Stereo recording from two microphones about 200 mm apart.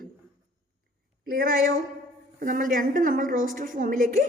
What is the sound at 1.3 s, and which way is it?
A woman's voice, 45° right (ahead or behind).